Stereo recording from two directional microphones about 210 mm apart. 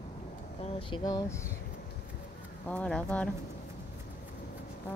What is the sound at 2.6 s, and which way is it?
Speech, 5° left (ahead or behind).